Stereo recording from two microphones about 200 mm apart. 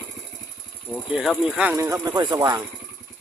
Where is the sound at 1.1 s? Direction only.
Centre (ahead or behind); by 2.6 s 20° right (ahead or behind).